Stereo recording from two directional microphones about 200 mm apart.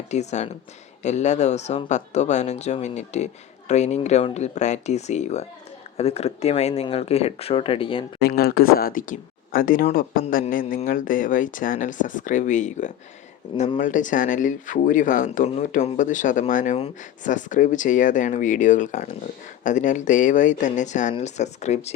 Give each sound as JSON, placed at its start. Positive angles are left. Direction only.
{"t": 0.1, "sound": "speech", "side_deg": 35}
{"t": 8.2, "sound": "speech", "side_deg": 50}